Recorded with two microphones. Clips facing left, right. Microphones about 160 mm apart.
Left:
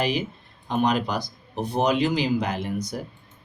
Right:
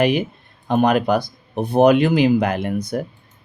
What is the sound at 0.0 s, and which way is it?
Speech, 60° right (ahead or behind).